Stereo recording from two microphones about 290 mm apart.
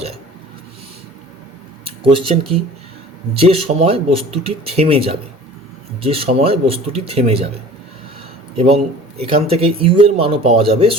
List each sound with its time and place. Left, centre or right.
1.8 s speech: centre
8.5 s speech: centre